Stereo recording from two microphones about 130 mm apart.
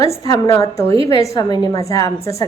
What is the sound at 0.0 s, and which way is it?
Speech, 25° left (ahead or behind).